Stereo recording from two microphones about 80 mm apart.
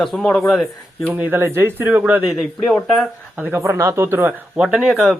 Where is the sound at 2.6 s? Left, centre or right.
Centre.